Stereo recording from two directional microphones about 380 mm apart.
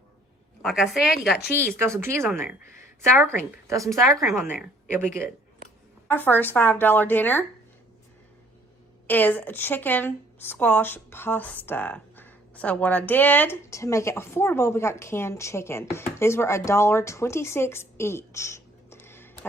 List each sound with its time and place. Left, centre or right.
0.6 s a woman's voice: centre
6.1 s a woman's voice: centre
9.0 s a woman's voice: centre